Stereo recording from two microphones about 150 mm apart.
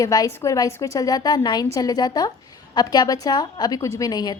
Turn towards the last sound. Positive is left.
turn(degrees=25)  # may be behind; listen again after turning